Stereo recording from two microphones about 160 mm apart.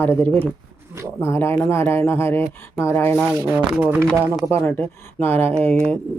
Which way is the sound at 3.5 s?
10° right (ahead or behind).